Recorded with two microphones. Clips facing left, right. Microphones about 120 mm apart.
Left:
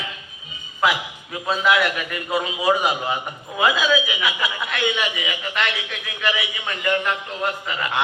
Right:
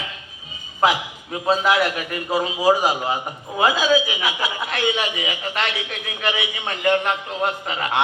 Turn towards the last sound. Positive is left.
turn(degrees=-40)  # may be behind; listen again after turning